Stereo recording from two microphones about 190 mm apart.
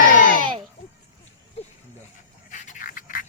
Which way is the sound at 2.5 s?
45° left (ahead or behind).